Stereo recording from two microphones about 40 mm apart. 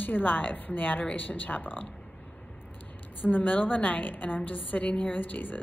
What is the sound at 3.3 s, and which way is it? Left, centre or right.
A woman's voice, left.